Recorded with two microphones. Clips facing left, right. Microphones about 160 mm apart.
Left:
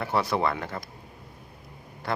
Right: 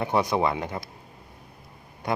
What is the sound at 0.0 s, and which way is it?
Speech, 15° right (ahead or behind).